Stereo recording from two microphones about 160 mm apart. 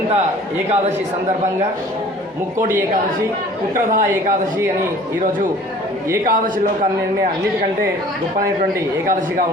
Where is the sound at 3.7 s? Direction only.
55° right (ahead or behind).